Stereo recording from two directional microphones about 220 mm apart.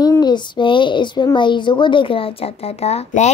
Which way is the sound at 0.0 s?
20° left (ahead or behind).